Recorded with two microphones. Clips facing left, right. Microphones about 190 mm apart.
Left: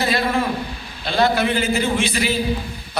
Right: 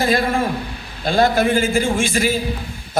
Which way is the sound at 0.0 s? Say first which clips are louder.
Right 2 dB; 50° right (ahead or behind).